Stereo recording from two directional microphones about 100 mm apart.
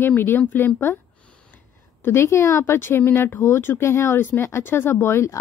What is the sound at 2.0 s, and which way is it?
Speech, 25° left (ahead or behind).